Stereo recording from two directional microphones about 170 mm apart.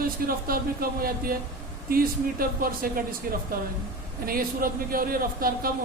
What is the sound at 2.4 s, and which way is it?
Speech, 60° right (ahead or behind).